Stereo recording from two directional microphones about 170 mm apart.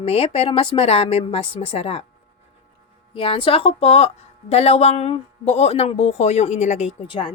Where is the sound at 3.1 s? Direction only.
30° left (ahead or behind).